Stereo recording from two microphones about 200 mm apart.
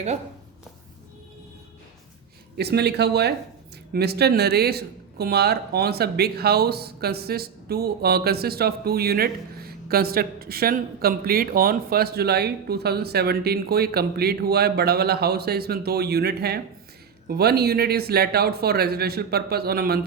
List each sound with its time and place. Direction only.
2.6 s speech: 55° right (ahead or behind)